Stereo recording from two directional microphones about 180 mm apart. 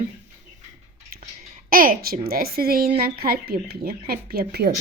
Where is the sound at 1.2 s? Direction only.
50° right (ahead or behind).